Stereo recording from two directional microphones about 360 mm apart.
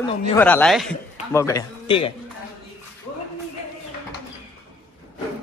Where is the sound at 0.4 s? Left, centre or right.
Centre.